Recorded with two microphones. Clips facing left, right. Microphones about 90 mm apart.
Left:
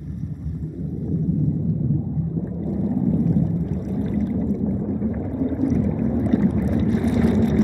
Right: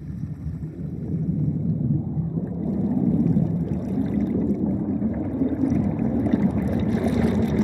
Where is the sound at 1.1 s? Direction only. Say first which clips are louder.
Left 3 dB; 55° right (ahead or behind).